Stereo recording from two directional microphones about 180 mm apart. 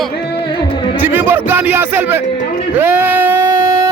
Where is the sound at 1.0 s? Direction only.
10° right (ahead or behind).